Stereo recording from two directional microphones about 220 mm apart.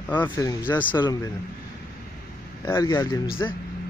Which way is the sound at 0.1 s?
10° left (ahead or behind).